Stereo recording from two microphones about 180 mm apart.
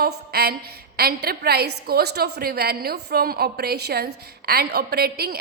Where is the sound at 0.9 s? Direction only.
60° right (ahead or behind).